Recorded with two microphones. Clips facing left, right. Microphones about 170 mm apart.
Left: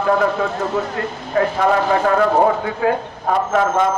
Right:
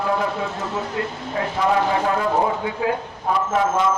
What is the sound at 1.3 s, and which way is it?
Speech, 55° left (ahead or behind).